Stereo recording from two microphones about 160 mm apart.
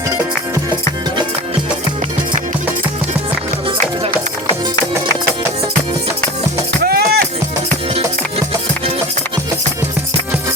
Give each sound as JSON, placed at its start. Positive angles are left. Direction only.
{"t": 6.8, "sound": "music", "side_deg": -75}